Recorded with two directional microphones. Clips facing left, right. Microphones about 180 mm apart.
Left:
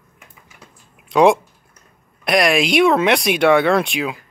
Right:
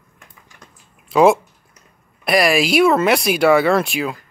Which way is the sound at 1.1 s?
5° right (ahead or behind).